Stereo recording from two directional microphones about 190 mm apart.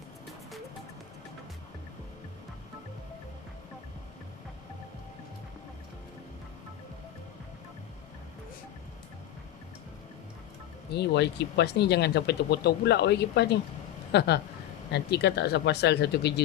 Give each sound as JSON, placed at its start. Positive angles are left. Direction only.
{"t": 10.9, "sound": "speech", "side_deg": 60}